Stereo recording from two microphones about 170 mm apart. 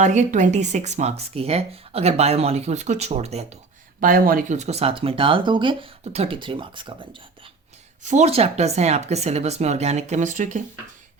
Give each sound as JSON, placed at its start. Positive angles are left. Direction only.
{"t": 0.0, "sound": "speech", "side_deg": -45}
{"t": 4.0, "sound": "speech", "side_deg": -55}
{"t": 8.0, "sound": "speech", "side_deg": -40}